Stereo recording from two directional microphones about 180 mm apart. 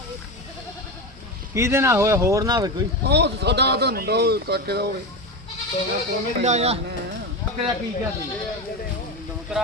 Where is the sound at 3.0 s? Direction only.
65° right (ahead or behind).